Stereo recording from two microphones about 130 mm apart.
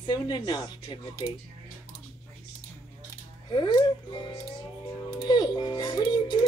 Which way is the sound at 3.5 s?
35° left (ahead or behind).